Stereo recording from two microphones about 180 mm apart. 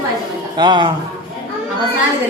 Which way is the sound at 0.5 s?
25° right (ahead or behind).